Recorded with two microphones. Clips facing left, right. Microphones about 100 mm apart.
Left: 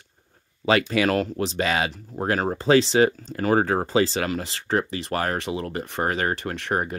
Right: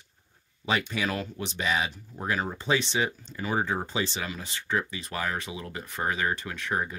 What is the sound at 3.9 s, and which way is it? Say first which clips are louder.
Speech: left 9 dB; 75° left (ahead or behind).